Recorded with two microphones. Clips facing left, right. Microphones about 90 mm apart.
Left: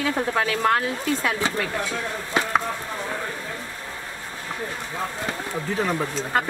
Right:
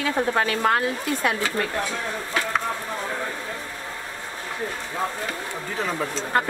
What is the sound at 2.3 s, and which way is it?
Speech, 20° left (ahead or behind).